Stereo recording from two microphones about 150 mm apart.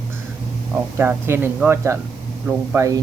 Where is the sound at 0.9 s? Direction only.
15° right (ahead or behind).